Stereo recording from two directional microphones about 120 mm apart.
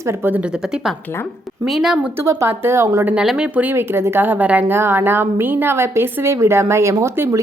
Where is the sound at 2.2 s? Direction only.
25° right (ahead or behind).